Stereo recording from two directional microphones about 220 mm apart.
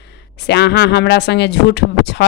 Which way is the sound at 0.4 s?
50° left (ahead or behind).